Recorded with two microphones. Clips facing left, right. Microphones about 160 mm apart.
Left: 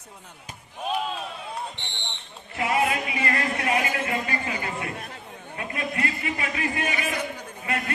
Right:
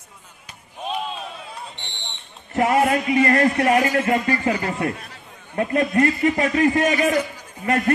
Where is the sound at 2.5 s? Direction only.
45° right (ahead or behind).